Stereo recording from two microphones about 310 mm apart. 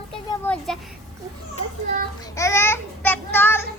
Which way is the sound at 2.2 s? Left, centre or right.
Centre.